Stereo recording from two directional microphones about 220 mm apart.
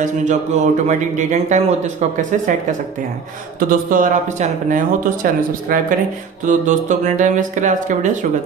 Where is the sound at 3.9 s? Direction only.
35° right (ahead or behind).